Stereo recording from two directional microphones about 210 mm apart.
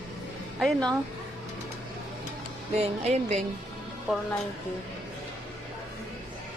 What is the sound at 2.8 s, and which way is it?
Speech, 30° right (ahead or behind).